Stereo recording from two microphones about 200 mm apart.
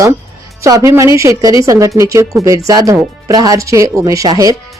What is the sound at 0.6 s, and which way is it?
Speech, 15° right (ahead or behind).